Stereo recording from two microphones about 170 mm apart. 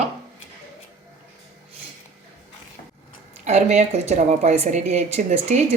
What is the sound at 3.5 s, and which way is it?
A woman's voice, 40° right (ahead or behind).